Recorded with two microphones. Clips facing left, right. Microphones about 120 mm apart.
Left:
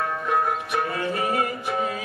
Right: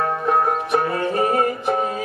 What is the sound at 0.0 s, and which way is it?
Music, 40° right (ahead or behind).